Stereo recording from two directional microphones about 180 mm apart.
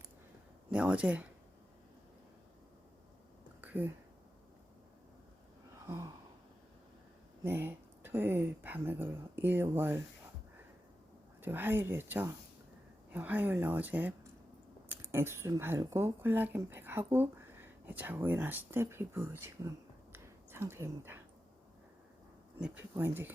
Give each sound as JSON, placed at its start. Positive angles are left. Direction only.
{"t": 0.7, "sound": "speech", "side_deg": -5}
{"t": 3.6, "sound": "a sound", "side_deg": -10}
{"t": 5.8, "sound": "gasp", "side_deg": -20}
{"t": 7.4, "sound": "speech", "side_deg": -10}
{"t": 11.4, "sound": "speech", "side_deg": -10}
{"t": 20.1, "sound": "a sound", "side_deg": -15}
{"t": 22.6, "sound": "speech", "side_deg": -10}